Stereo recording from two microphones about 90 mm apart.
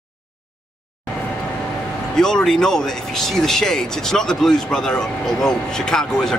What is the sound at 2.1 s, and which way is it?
Speech, 5° left (ahead or behind).